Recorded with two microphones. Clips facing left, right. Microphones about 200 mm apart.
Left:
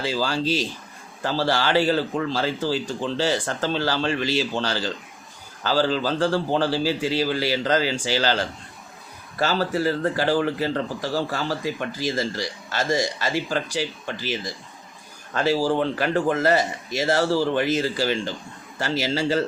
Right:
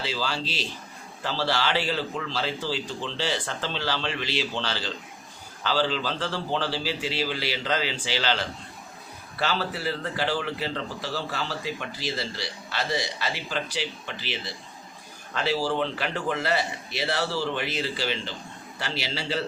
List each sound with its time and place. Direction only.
0.0 s a man's voice: 45° left (ahead or behind)